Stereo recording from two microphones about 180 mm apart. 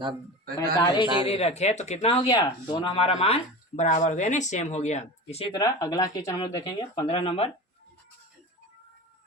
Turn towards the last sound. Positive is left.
turn(degrees=35)  # may be behind; listen again after turning